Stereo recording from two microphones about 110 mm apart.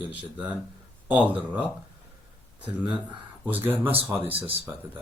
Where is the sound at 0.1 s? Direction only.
15° right (ahead or behind).